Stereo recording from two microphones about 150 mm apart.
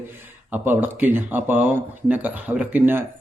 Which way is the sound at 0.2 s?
10° right (ahead or behind).